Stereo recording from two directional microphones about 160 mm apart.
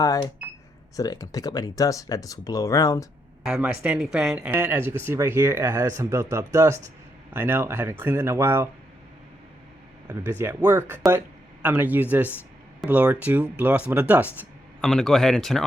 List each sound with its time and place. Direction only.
0.0 s speech: 20° left (ahead or behind)
3.4 s speech: 5° right (ahead or behind)
10.1 s speech: 15° right (ahead or behind)
14.8 s speech: 5° left (ahead or behind)